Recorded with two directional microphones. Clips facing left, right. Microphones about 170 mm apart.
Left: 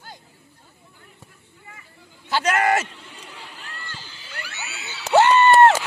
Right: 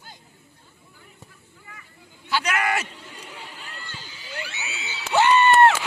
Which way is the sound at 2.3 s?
50° left (ahead or behind).